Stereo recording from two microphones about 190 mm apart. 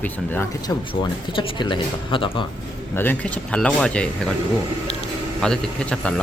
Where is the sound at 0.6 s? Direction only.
25° left (ahead or behind).